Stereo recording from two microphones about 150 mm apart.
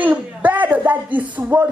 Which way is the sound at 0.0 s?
10° right (ahead or behind).